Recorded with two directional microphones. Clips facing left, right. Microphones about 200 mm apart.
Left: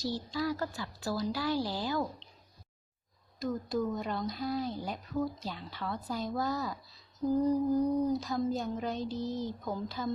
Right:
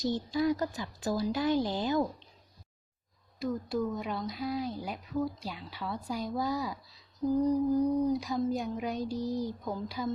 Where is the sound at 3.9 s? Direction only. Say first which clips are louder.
Even; 5° right (ahead or behind).